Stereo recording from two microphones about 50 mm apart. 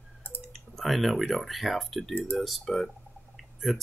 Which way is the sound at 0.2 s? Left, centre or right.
Left.